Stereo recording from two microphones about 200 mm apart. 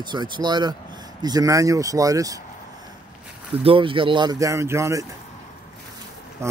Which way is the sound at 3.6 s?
25° right (ahead or behind).